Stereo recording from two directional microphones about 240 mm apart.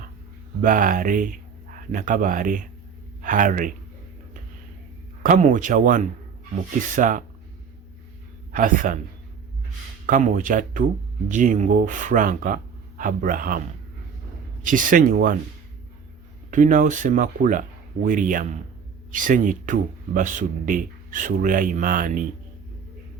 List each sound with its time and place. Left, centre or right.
0.6 s speech: right
5.2 s speech: right
8.5 s speech: right
10.1 s speech: right
14.6 s speech: right
16.5 s speech: right